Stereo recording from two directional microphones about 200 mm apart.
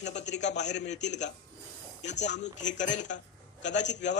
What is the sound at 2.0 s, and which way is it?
A man's voice, 35° left (ahead or behind).